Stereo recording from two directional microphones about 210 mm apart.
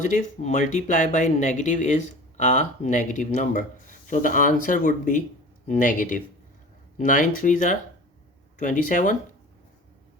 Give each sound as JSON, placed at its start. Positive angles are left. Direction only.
{"t": 0.0, "sound": "speech", "side_deg": 35}